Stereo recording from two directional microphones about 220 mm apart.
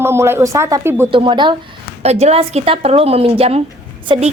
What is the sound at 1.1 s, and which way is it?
A woman's voice, 20° right (ahead or behind).